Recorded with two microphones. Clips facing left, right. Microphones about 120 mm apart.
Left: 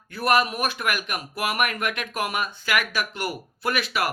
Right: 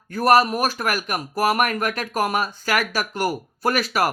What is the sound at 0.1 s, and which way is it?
Speech, 40° right (ahead or behind).